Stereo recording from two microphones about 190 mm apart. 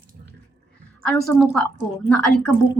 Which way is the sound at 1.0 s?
5° left (ahead or behind).